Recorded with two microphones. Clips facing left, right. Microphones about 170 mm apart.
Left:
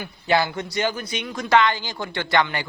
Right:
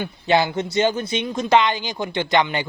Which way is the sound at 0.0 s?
20° right (ahead or behind).